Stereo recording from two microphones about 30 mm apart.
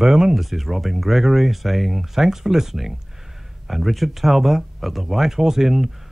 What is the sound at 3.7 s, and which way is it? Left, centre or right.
Speech, centre.